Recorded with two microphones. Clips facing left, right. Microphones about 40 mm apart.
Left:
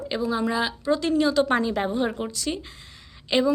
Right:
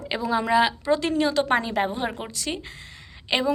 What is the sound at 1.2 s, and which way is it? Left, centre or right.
A woman's voice, right.